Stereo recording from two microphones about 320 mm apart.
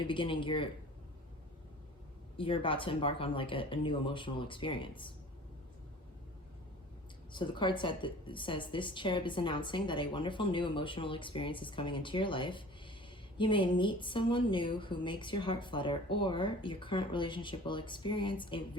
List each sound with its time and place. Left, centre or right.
0.0 s a woman's voice: centre
2.4 s a woman's voice: centre
7.3 s a woman's voice: centre